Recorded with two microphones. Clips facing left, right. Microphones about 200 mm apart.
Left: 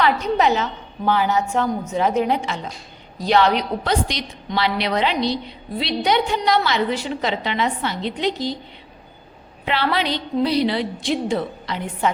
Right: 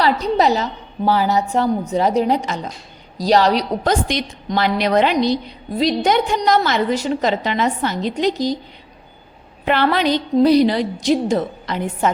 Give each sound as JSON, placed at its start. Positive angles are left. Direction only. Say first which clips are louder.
{"t": 0.0, "sound": "a woman's voice", "louder": "right 2 dB", "side_deg": -35}
{"t": 4.1, "sound": "a woman's voice", "louder": "right 5 dB", "side_deg": -50}
{"t": 9.6, "sound": "a woman's voice", "louder": "right 5 dB", "side_deg": -50}